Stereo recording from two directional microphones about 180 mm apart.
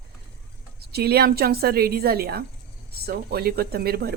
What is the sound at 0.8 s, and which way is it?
Speech, 60° right (ahead or behind).